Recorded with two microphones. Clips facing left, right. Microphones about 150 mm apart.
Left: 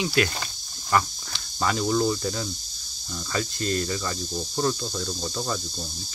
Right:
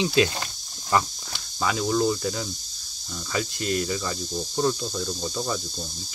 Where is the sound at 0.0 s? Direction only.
20° right (ahead or behind).